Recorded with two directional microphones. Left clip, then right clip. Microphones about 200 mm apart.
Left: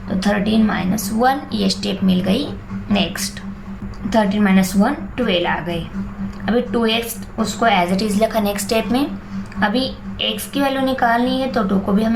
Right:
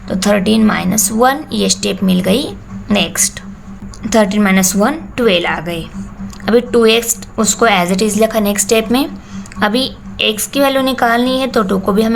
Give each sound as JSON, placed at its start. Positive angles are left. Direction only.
{"t": 0.1, "sound": "a woman's voice", "side_deg": -45}